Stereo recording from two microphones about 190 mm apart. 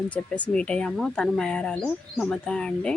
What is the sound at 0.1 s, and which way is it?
Speech, 5° left (ahead or behind).